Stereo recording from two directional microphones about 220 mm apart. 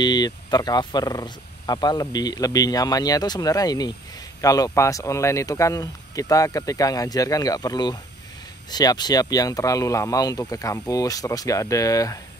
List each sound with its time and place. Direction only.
0.0 s speech: 20° left (ahead or behind)